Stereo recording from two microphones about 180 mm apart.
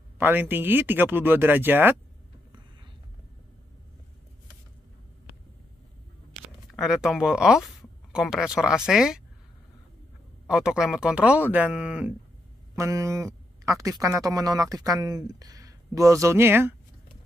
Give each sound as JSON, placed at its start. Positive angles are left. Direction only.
{"t": 0.2, "sound": "speech", "side_deg": -10}
{"t": 6.7, "sound": "speech", "side_deg": 0}
{"t": 10.4, "sound": "speech", "side_deg": -5}
{"t": 12.7, "sound": "speech", "side_deg": -20}